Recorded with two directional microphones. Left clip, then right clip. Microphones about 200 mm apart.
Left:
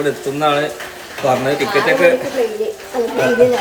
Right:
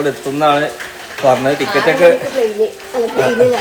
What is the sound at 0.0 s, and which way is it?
Speech, 5° right (ahead or behind).